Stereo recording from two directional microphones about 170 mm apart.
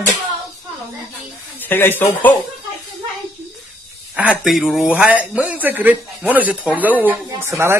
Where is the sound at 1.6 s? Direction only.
10° left (ahead or behind).